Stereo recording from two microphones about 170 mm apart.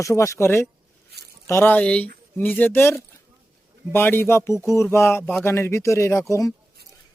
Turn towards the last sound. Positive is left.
turn(degrees=15)  # may be behind; listen again after turning